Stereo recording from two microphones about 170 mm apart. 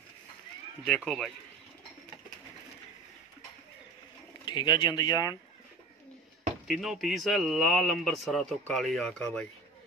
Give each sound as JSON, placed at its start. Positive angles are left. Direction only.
{"t": 0.8, "sound": "a man's voice", "side_deg": 5}
{"t": 4.5, "sound": "speech", "side_deg": 25}
{"t": 6.7, "sound": "a man's voice", "side_deg": 0}